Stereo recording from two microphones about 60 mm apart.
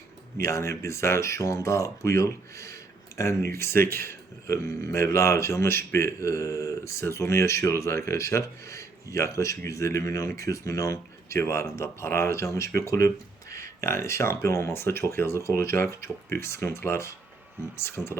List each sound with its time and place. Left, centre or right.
0.4 s speech: left